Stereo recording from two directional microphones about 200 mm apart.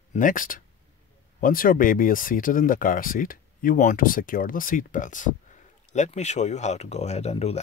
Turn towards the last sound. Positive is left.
turn(degrees=30)  # may be behind; listen again after turning